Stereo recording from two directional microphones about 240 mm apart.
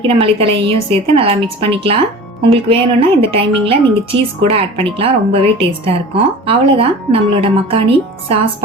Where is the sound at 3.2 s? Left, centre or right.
Right.